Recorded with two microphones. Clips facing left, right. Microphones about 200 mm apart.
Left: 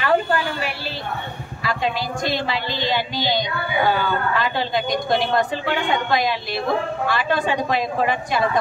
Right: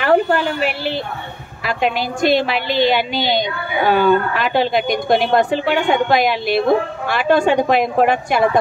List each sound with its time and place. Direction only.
0.0 s a woman's voice: 65° right (ahead or behind)